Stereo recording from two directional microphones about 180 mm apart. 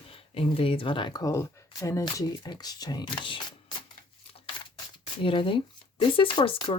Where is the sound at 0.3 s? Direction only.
30° left (ahead or behind).